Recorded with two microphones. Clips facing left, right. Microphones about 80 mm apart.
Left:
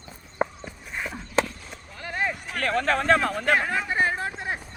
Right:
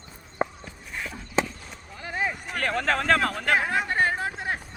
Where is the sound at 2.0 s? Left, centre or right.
Centre.